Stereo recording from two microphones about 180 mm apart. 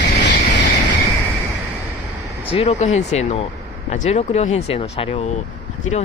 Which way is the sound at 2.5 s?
35° left (ahead or behind).